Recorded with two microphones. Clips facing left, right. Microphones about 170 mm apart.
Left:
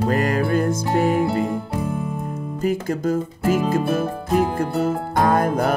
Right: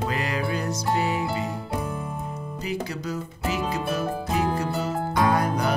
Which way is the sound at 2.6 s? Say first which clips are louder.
Left 9 dB; 50° left (ahead or behind).